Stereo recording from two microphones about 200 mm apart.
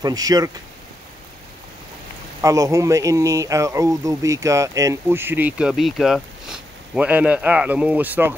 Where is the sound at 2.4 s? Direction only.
15° right (ahead or behind).